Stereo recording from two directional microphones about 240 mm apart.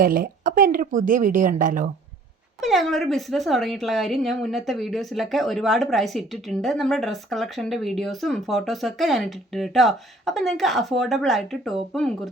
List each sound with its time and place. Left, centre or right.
0.0 s speech: right
2.6 s a woman's voice: centre